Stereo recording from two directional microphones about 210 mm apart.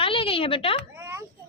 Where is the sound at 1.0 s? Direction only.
15° right (ahead or behind).